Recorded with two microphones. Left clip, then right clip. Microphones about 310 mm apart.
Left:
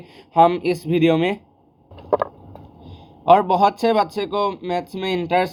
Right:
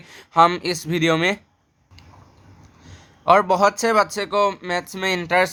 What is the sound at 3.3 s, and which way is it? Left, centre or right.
Speech, right.